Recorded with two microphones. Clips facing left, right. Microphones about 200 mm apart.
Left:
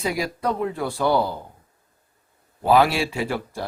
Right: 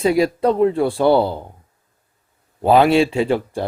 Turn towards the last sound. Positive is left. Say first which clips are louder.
# right 8 dB
turn(degrees=-25)  # may be behind; listen again after turning